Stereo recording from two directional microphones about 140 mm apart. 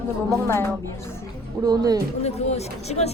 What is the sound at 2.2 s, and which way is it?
Speech, 50° left (ahead or behind).